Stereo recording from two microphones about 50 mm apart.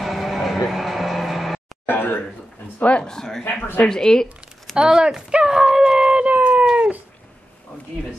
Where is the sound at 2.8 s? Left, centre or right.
Left.